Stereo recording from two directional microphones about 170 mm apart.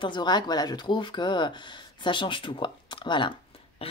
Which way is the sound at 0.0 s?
25° left (ahead or behind).